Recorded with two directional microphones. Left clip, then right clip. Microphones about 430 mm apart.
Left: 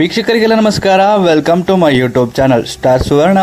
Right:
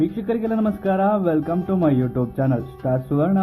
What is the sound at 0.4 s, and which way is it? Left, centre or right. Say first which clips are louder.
A man's voice: left 13 dB; centre.